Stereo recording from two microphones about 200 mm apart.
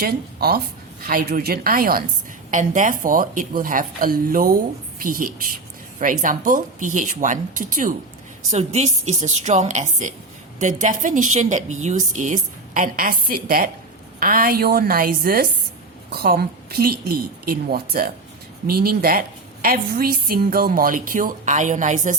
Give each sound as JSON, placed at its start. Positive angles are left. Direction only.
{"t": 0.0, "sound": "a woman's voice", "side_deg": -50}